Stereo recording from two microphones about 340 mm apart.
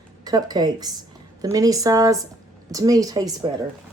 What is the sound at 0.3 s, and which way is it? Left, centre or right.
Speech, centre.